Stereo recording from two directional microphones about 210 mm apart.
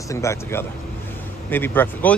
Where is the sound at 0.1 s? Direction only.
15° left (ahead or behind).